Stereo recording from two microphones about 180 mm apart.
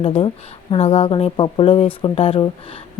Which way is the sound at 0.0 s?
30° left (ahead or behind).